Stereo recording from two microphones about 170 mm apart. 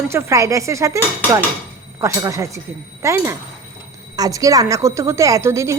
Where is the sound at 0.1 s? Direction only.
15° right (ahead or behind).